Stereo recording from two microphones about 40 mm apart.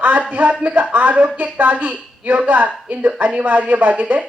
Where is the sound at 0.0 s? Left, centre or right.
Right.